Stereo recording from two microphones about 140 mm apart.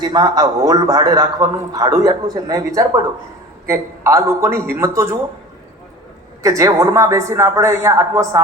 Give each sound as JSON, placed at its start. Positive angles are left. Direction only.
{"t": 0.0, "sound": "a man's voice", "side_deg": -30}
{"t": 6.4, "sound": "a man's voice", "side_deg": -20}